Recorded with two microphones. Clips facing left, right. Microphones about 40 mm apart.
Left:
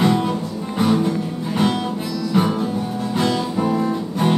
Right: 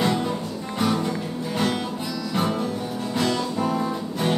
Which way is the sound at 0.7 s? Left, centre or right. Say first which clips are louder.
Left 5 dB; centre.